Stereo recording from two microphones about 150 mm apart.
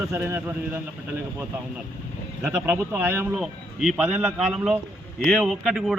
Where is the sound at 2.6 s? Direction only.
10° right (ahead or behind).